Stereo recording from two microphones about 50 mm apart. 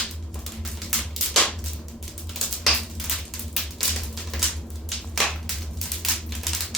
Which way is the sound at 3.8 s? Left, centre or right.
Centre.